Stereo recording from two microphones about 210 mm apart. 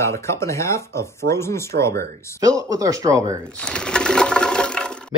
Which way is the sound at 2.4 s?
15° right (ahead or behind).